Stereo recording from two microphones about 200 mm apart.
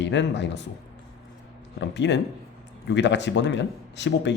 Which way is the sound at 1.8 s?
60° left (ahead or behind).